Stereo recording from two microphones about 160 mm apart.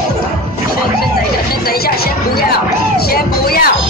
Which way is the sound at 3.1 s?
70° left (ahead or behind).